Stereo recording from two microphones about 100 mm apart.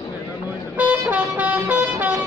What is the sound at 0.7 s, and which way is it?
Vehicle, 15° right (ahead or behind).